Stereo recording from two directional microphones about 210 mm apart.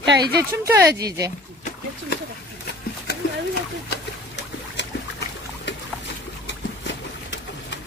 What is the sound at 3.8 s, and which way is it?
Boat, 55° left (ahead or behind).